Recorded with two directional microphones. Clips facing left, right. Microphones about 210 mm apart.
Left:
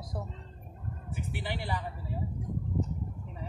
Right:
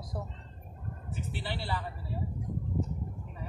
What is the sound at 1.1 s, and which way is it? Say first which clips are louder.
Speech: left 1 dB; 15° left (ahead or behind).